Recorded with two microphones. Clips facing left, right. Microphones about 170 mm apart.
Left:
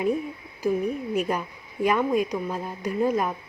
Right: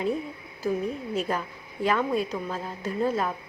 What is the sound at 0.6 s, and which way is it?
A woman's voice, 15° left (ahead or behind).